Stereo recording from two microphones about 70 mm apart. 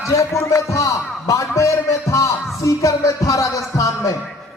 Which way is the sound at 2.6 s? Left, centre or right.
Left.